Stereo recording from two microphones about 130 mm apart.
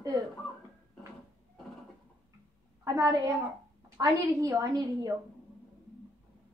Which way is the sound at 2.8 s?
25° right (ahead or behind).